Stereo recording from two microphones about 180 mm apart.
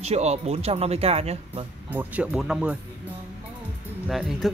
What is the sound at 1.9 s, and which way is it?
Speech, 10° right (ahead or behind).